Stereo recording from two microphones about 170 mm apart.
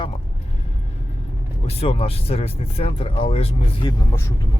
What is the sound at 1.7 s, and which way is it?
Speech, 35° left (ahead or behind).